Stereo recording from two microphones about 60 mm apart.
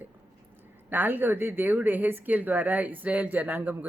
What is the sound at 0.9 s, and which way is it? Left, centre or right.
A woman's voice, right.